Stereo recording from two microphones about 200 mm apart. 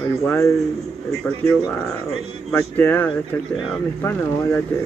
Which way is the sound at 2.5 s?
10° left (ahead or behind).